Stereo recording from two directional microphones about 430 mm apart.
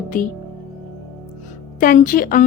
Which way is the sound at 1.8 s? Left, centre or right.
Centre.